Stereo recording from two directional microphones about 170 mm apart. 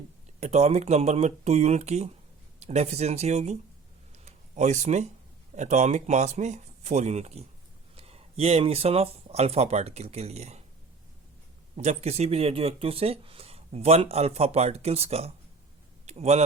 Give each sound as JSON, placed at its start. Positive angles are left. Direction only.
{"t": 0.3, "sound": "speech", "side_deg": -40}
{"t": 4.3, "sound": "a sound", "side_deg": -45}
{"t": 5.5, "sound": "speech", "side_deg": -40}
{"t": 11.8, "sound": "speech", "side_deg": -40}